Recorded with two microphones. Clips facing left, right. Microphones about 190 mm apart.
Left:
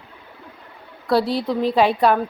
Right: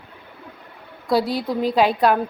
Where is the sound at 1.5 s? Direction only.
Centre (ahead or behind).